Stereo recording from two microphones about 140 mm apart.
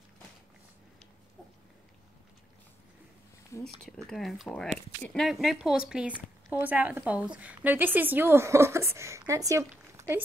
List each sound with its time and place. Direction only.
3.8 s a woman's voice: 5° left (ahead or behind); by 10.2 s 20° right (ahead or behind)